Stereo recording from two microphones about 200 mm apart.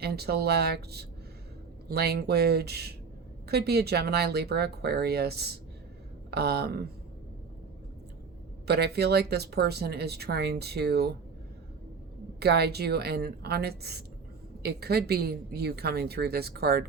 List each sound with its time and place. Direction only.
0.0 s speech: 55° right (ahead or behind)
8.6 s speech: 55° right (ahead or behind)
12.4 s speech: 55° right (ahead or behind)